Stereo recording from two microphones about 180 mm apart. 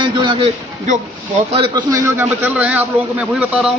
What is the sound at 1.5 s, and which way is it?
Speech, 30° right (ahead or behind).